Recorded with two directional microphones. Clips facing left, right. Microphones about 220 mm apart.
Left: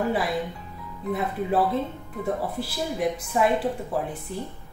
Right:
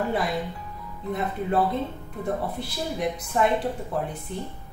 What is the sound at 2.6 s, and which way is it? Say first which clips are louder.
A woman's voice: left 2 dB; 5° left (ahead or behind).